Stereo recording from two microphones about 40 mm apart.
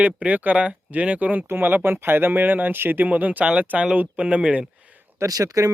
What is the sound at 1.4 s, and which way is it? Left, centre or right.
Speech, right.